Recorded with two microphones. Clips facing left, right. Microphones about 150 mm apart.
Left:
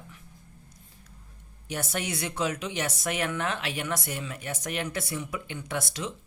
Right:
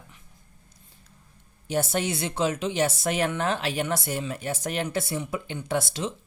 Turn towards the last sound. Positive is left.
turn(degrees=-30)  # may be behind; listen again after turning